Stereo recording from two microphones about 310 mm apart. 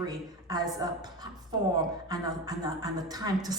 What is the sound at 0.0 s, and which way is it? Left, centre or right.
A woman's voice, centre.